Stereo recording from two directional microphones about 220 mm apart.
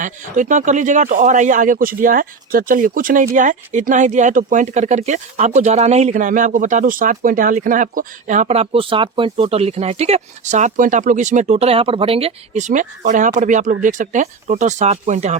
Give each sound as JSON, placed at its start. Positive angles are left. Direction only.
{"t": 0.0, "sound": "speech", "side_deg": -35}